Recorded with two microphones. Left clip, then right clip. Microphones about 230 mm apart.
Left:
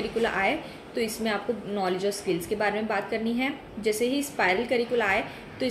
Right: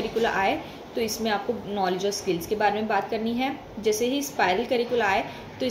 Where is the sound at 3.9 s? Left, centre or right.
Left.